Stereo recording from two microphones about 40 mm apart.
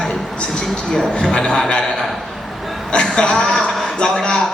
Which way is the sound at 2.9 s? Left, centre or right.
Centre.